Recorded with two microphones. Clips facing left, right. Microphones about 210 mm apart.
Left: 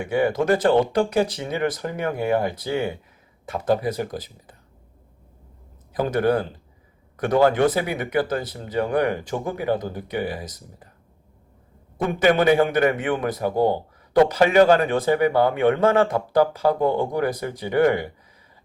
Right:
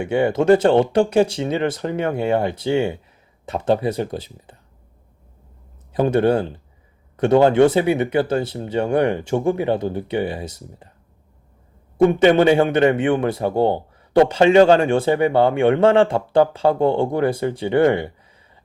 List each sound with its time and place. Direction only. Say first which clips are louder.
0.0 s speech: right 3 dB; 25° right (ahead or behind)
5.9 s speech: right 4 dB; 25° right (ahead or behind)
12.2 s speech: right 1 dB; 25° right (ahead or behind)